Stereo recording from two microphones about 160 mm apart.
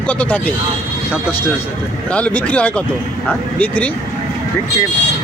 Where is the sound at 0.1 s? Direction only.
10° left (ahead or behind).